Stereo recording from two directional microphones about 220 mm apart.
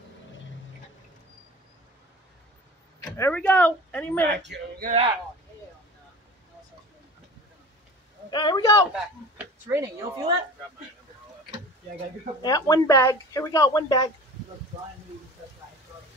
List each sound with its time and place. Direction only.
3.2 s speech: 10° left (ahead or behind)
4.4 s speech: 50° right (ahead or behind)
4.8 s speech: 25° right (ahead or behind)
8.3 s speech: 20° left (ahead or behind)
9.7 s speech: 10° right (ahead or behind)
12.4 s speech: 15° left (ahead or behind)